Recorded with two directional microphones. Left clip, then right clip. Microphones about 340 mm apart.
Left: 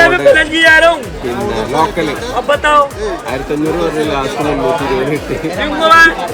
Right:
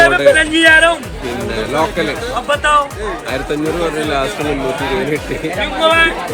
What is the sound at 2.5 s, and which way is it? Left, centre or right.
Speech, left.